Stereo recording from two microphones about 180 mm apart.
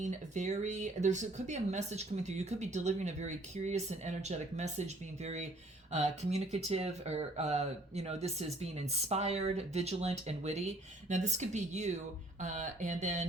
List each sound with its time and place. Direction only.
0.0 s speech: 40° right (ahead or behind)